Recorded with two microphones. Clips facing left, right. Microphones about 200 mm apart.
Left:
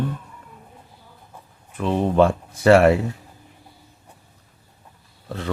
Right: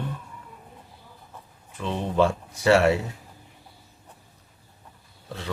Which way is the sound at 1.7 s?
55° left (ahead or behind).